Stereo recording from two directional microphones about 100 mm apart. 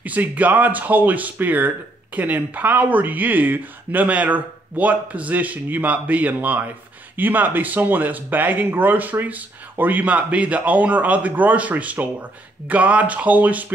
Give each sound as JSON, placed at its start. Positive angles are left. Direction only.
{"t": 0.0, "sound": "speech", "side_deg": -15}